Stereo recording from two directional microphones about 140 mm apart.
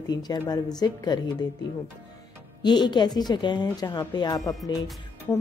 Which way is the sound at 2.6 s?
30° left (ahead or behind).